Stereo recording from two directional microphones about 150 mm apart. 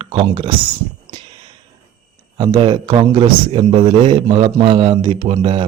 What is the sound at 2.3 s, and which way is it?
Speech, 30° right (ahead or behind).